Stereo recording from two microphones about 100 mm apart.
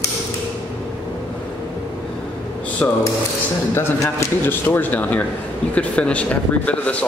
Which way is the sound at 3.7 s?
25° left (ahead or behind).